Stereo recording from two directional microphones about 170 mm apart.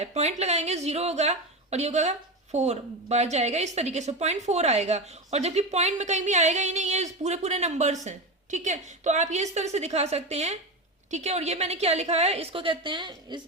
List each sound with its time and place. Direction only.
0.0 s a woman's voice: 40° right (ahead or behind)